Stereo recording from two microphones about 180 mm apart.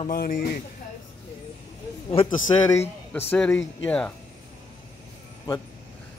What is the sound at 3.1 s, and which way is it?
Speech, 10° left (ahead or behind).